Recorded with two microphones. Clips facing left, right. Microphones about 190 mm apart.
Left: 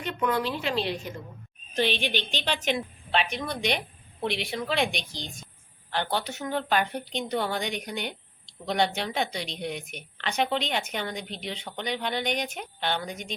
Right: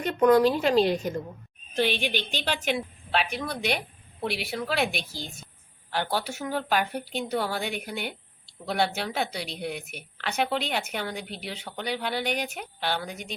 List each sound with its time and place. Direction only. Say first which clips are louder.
0.0 s a woman's voice: right 8 dB; 40° right (ahead or behind)
1.7 s a woman's voice: right 1 dB; 10° right (ahead or behind)